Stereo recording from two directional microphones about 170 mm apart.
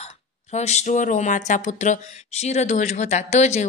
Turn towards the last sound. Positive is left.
turn(degrees=40)  # may be behind; listen again after turning